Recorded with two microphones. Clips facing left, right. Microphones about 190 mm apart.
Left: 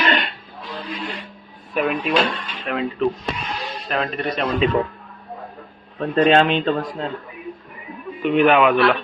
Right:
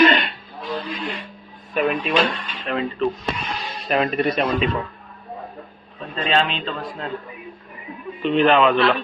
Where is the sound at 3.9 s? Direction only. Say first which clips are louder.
Right 4 dB; 10° right (ahead or behind).